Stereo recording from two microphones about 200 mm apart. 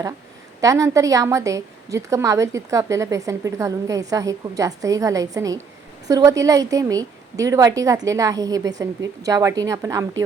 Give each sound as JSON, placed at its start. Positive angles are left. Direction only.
{"t": 0.6, "sound": "a woman's voice", "side_deg": -15}